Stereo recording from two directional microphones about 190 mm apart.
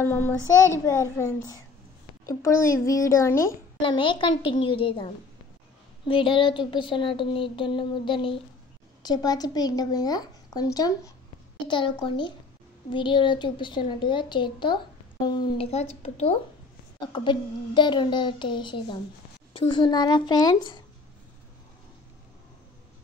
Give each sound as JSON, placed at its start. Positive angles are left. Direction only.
{"t": 0.0, "sound": "a child's voice", "side_deg": 10}
{"t": 3.8, "sound": "a woman's voice", "side_deg": 25}
{"t": 6.0, "sound": "a woman's voice", "side_deg": 25}